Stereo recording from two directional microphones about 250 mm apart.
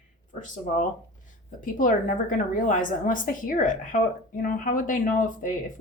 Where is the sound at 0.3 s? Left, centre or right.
Left.